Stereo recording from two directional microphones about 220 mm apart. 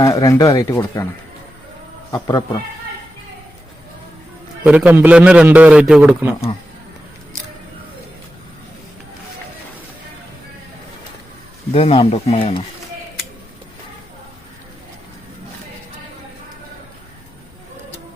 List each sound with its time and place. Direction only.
0.0 s speech: 15° left (ahead or behind)
2.1 s speech: 15° left (ahead or behind)
4.6 s a man's voice: 5° right (ahead or behind)
11.7 s speech: 25° left (ahead or behind)